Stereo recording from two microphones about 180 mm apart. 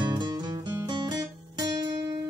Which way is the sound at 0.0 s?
25° right (ahead or behind).